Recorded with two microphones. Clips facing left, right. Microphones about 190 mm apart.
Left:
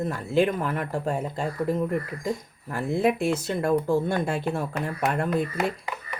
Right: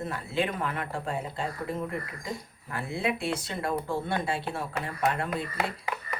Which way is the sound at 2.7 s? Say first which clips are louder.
Left 7 dB; 45° left (ahead or behind).